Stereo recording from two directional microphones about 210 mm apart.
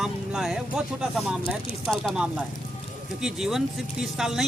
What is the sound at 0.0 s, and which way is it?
Music, 5° right (ahead or behind).